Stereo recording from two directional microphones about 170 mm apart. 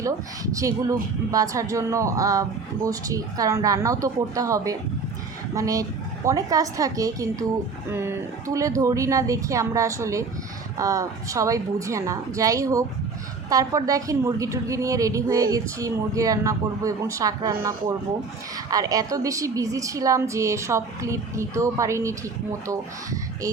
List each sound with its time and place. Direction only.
0.0 s a woman's voice: 20° right (ahead or behind)